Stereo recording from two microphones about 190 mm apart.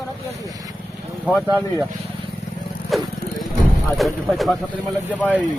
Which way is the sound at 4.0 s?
Centre (ahead or behind).